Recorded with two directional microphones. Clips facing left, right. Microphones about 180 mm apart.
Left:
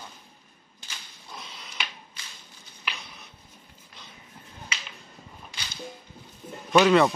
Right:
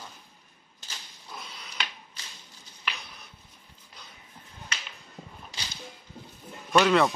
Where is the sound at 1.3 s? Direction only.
Centre (ahead or behind).